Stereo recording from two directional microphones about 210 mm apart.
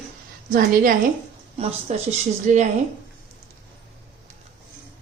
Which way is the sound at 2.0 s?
35° right (ahead or behind).